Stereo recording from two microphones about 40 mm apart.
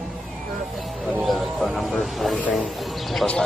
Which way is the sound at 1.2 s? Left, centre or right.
Centre.